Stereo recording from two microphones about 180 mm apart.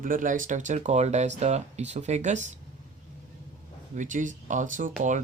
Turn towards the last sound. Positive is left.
turn(degrees=-45)  # may be behind; listen again after turning